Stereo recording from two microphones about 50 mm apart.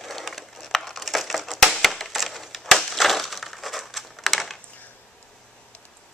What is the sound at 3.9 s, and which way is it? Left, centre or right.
Typewriter, centre.